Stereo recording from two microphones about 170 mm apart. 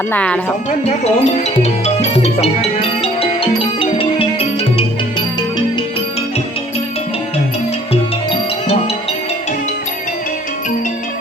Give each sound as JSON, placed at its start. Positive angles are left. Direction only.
{"t": 0.1, "sound": "speech", "side_deg": 5}
{"t": 0.9, "sound": "music", "side_deg": 40}
{"t": 8.3, "sound": "music", "side_deg": 35}